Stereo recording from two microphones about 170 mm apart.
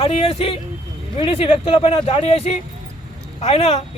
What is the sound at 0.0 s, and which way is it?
A man's voice, 35° left (ahead or behind).